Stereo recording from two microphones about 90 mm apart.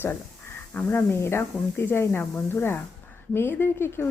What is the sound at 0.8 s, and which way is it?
A woman's voice, 25° left (ahead or behind).